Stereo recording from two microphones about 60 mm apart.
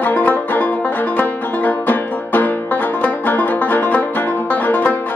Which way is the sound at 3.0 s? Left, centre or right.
Left.